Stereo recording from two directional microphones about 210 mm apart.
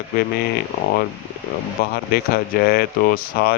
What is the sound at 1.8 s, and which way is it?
Speech, 45° left (ahead or behind).